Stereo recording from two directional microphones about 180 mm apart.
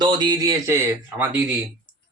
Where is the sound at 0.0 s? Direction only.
25° right (ahead or behind).